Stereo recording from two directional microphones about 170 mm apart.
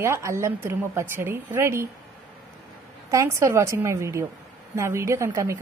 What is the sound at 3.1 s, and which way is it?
A woman's voice, 15° right (ahead or behind).